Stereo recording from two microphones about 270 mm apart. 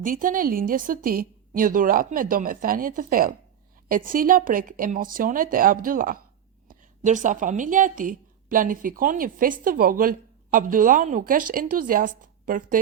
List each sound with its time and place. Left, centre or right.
0.0 s a woman's voice: right